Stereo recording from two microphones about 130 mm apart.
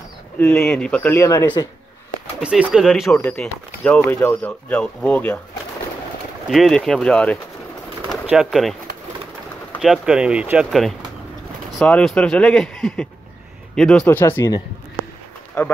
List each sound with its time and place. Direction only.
0.4 s speech: 15° left (ahead or behind)
1.1 s speech: 20° left (ahead or behind)
2.4 s speech: 5° right (ahead or behind)
3.0 s speech: 10° left (ahead or behind)
6.5 s speech: centre (ahead or behind)
8.3 s speech: 5° right (ahead or behind)
9.8 s speech: 5° right (ahead or behind)
10.7 s speech: centre (ahead or behind); by 14.5 s 15° left (ahead or behind)